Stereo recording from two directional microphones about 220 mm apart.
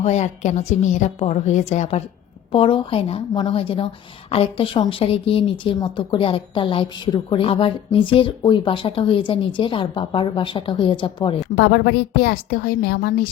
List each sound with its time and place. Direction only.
0.0 s a woman's voice: 30° left (ahead or behind)
11.5 s a woman's voice: 50° left (ahead or behind)